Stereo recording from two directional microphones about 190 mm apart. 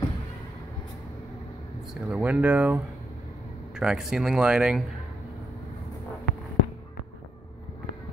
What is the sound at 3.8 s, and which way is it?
Speech, 5° right (ahead or behind).